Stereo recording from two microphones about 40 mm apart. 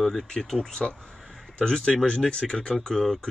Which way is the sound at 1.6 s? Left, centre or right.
Centre.